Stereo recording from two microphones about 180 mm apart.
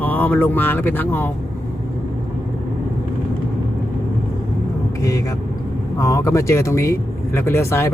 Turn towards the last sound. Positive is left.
turn(degrees=15)  # may be behind; listen again after turning